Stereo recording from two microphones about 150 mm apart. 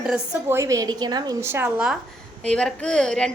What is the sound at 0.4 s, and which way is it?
Speech, 20° right (ahead or behind).